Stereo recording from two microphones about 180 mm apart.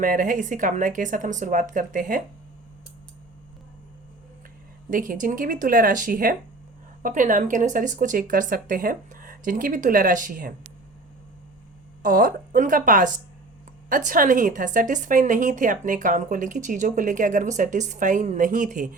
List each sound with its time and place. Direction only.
0.0 s speech: 50° right (ahead or behind)
4.9 s speech: 50° right (ahead or behind)
12.0 s speech: 50° right (ahead or behind)